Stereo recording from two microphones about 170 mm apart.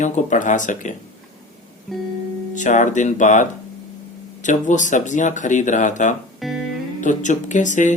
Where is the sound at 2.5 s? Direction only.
45° left (ahead or behind).